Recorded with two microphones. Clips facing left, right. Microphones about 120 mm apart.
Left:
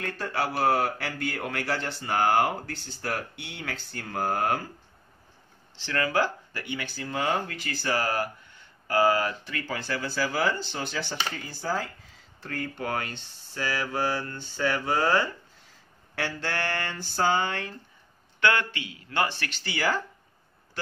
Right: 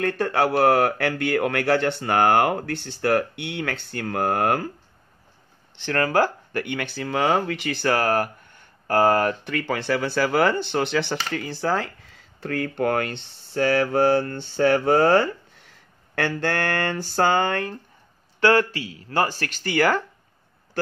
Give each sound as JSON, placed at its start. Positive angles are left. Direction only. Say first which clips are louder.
{"t": 0.0, "sound": "speech", "louder": "right 8 dB", "side_deg": -60}
{"t": 5.8, "sound": "speech", "louder": "right 5 dB", "side_deg": -50}
{"t": 18.4, "sound": "speech", "louder": "right 7 dB", "side_deg": -35}